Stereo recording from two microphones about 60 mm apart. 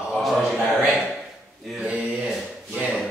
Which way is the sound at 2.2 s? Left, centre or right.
Centre.